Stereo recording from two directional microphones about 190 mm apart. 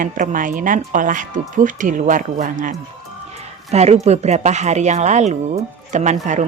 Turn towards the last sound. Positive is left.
turn(degrees=-40)  # may be behind; listen again after turning